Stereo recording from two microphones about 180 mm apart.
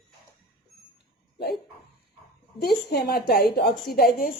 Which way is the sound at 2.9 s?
60° left (ahead or behind).